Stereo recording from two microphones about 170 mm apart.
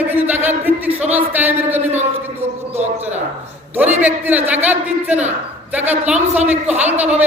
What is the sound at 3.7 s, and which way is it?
A woman's voice, 10° right (ahead or behind).